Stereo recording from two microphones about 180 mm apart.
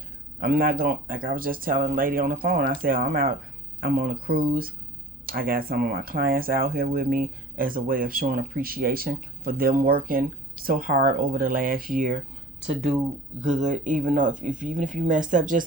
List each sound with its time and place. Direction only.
0.3 s speech: 55° right (ahead or behind)
13.4 s speech: 40° right (ahead or behind)